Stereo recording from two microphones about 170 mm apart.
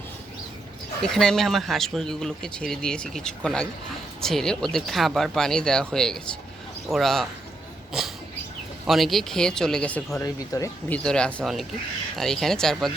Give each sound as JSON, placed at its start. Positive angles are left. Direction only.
{"t": 1.0, "sound": "speech", "side_deg": 5}
{"t": 8.9, "sound": "speech", "side_deg": 0}
{"t": 10.2, "sound": "speech", "side_deg": 20}
{"t": 10.9, "sound": "speech", "side_deg": 5}